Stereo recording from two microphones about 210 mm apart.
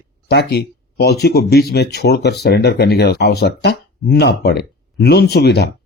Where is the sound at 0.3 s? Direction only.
50° left (ahead or behind).